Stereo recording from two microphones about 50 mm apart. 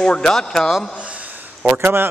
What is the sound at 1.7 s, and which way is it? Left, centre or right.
Speech, right.